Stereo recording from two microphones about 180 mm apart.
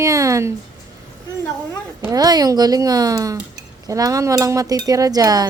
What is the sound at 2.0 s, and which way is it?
Chink, 20° right (ahead or behind).